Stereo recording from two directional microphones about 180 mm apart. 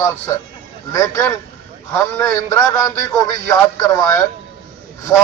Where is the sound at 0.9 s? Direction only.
15° left (ahead or behind).